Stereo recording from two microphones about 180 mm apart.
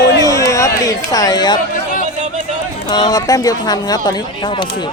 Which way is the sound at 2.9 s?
25° left (ahead or behind).